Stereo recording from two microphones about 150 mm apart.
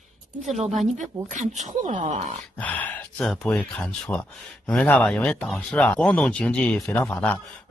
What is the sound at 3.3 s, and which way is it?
Speech, 5° left (ahead or behind).